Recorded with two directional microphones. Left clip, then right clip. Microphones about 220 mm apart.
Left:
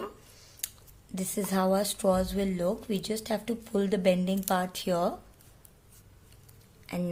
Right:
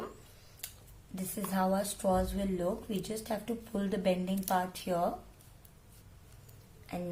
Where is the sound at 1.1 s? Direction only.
45° left (ahead or behind).